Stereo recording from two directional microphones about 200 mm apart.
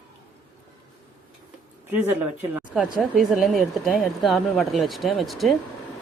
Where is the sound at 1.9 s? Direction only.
10° right (ahead or behind).